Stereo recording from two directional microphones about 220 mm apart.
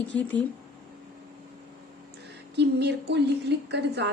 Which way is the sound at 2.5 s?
50° right (ahead or behind).